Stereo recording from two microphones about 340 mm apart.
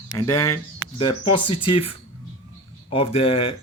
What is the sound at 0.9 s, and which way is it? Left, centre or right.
Speech, centre.